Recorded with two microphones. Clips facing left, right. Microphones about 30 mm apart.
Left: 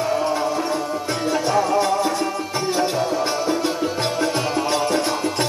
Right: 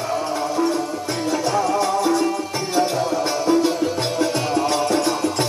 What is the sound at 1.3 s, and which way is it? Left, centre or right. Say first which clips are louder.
Music: left 1 dB; centre.